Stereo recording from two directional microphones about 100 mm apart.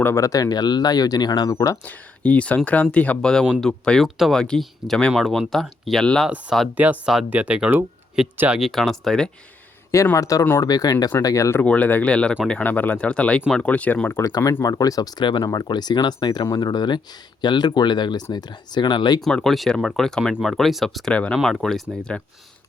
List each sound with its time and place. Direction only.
0.0 s speech: 30° left (ahead or behind)
1.8 s speech: 15° left (ahead or behind); by 6.7 s 5° right (ahead or behind)
6.7 s speech: 15° right (ahead or behind); by 9.3 s 5° left (ahead or behind)
10.2 s speech: 35° left (ahead or behind)
11.6 s speech: 15° left (ahead or behind)
14.2 s speech: 35° left (ahead or behind)
19.2 s speech: 5° left (ahead or behind)